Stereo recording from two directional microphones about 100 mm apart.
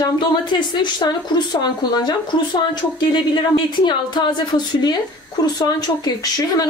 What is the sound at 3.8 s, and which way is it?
A woman's voice, 50° left (ahead or behind).